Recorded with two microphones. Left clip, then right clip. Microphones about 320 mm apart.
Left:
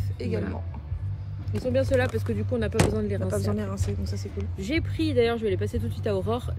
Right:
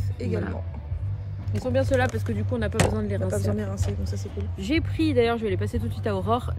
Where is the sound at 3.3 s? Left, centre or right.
Left.